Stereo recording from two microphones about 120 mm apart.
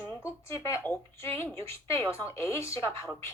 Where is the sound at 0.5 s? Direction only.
25° left (ahead or behind).